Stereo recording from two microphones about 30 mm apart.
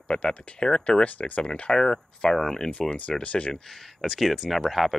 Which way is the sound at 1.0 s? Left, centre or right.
Left.